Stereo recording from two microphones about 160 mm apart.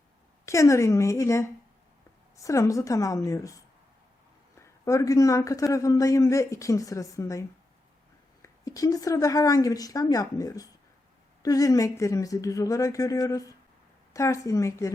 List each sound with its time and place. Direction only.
0.4 s a man's voice: 20° left (ahead or behind)